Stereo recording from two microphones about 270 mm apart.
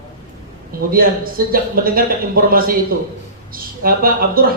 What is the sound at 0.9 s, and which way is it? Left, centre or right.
A man's voice, right.